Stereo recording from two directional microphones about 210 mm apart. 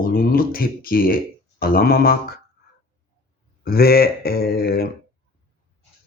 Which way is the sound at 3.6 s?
45° left (ahead or behind).